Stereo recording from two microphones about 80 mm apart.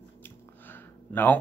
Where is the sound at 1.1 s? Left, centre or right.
Left.